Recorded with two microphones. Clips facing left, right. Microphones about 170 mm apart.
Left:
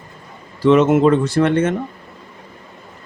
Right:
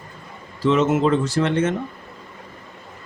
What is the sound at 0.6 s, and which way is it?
A man's voice, 60° left (ahead or behind).